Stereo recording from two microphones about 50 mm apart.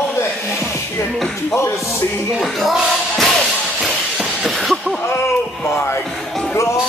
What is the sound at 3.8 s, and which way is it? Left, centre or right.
Shatter, centre.